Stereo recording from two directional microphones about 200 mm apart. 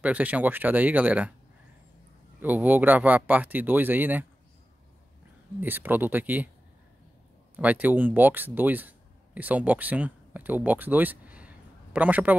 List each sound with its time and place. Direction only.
0.0 s speech: 5° right (ahead or behind)
2.4 s speech: 10° right (ahead or behind)
5.6 s speech: 10° right (ahead or behind)
7.5 s speech: 10° right (ahead or behind)